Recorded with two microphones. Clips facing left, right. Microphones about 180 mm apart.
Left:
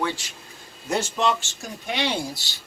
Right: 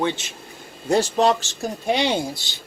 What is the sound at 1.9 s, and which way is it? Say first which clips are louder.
Speech: right 5 dB; 25° right (ahead or behind).